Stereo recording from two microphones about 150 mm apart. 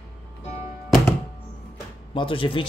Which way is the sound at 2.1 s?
35° left (ahead or behind).